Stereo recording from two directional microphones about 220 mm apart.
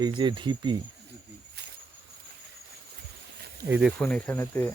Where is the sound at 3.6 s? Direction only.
5° right (ahead or behind).